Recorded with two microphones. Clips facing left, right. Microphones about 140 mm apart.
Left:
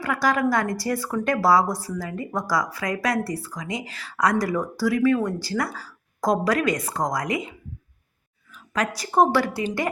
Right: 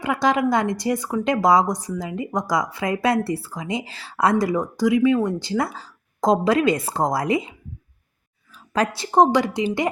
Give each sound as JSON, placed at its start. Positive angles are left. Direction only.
{"t": 0.0, "sound": "speech", "side_deg": -20}
{"t": 8.5, "sound": "a woman's voice", "side_deg": -30}